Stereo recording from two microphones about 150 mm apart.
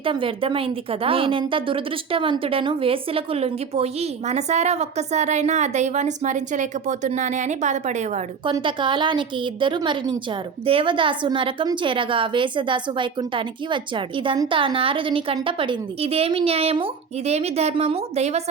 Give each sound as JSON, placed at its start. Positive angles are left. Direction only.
{"t": 0.0, "sound": "a woman's voice", "side_deg": -35}
{"t": 8.6, "sound": "a woman's voice", "side_deg": -35}